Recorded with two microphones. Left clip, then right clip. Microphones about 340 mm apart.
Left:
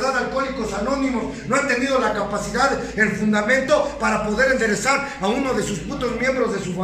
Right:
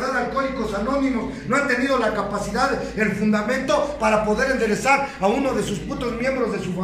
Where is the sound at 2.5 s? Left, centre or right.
Centre.